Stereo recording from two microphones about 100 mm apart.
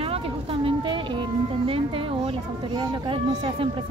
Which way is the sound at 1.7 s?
70° right (ahead or behind).